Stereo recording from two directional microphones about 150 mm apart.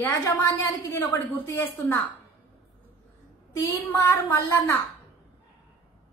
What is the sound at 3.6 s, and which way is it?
A woman's voice, 20° left (ahead or behind).